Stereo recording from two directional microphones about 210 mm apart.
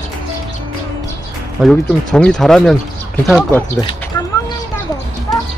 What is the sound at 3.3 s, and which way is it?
Speech, 20° left (ahead or behind).